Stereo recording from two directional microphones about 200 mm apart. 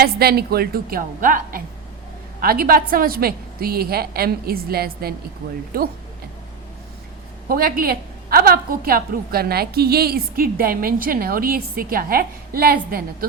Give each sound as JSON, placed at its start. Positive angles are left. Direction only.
{"t": 0.0, "sound": "a woman's voice", "side_deg": -50}
{"t": 7.4, "sound": "a woman's voice", "side_deg": -45}